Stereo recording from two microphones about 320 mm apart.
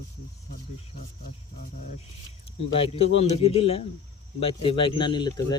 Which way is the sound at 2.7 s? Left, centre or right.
Centre.